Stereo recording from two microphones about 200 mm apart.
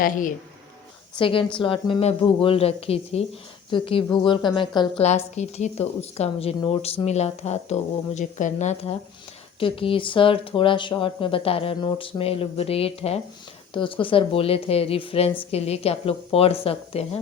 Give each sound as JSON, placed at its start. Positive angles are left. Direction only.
{"t": 0.0, "sound": "a woman's voice", "side_deg": 40}
{"t": 1.2, "sound": "speech", "side_deg": 25}
{"t": 5.0, "sound": "a woman's voice", "side_deg": 35}